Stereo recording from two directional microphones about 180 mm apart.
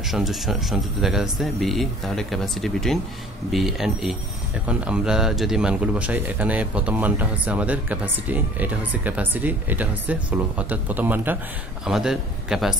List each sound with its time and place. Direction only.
0.1 s speech: centre (ahead or behind)